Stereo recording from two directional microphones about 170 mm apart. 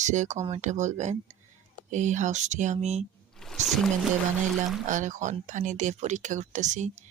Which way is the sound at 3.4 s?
Centre (ahead or behind).